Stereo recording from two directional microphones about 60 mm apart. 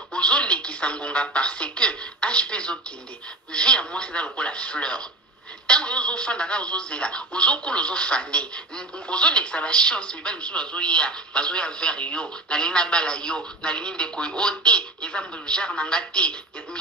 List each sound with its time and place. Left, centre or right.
0.1 s speech: centre